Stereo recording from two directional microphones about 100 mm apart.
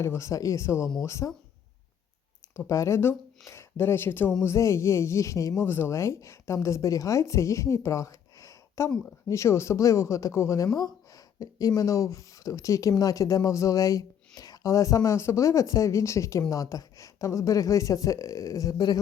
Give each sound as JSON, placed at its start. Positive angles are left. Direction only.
{"t": 0.0, "sound": "speech", "side_deg": 30}
{"t": 2.6, "sound": "speech", "side_deg": 30}
{"t": 5.6, "sound": "speech", "side_deg": 20}